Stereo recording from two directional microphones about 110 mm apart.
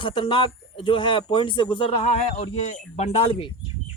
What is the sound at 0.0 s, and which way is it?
Speech, 50° left (ahead or behind).